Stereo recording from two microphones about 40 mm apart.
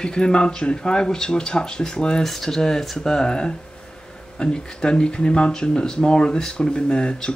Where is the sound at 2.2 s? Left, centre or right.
Centre.